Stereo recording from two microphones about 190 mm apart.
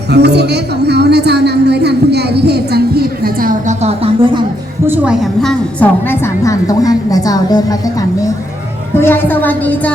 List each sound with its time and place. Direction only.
0.1 s a woman's voice: 60° right (ahead or behind); by 4.4 s 30° right (ahead or behind)
4.9 s a woman's voice: 5° right (ahead or behind); by 7.8 s 20° left (ahead or behind)
9.0 s a woman's voice: 10° left (ahead or behind)